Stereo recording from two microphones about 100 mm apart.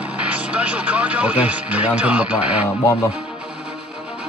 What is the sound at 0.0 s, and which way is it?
Speech, 10° right (ahead or behind).